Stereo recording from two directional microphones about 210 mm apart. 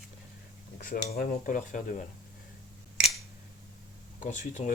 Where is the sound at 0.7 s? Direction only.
40° left (ahead or behind).